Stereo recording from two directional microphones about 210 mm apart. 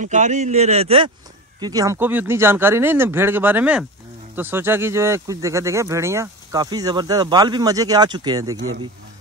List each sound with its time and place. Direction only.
0.0 s a man's voice: 35° right (ahead or behind); by 8.5 s 20° right (ahead or behind)
8.5 s speech: 75° right (ahead or behind)